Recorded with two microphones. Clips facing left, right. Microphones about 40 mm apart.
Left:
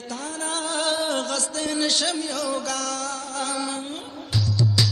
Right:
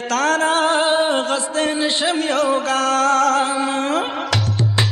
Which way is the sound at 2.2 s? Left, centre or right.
Right.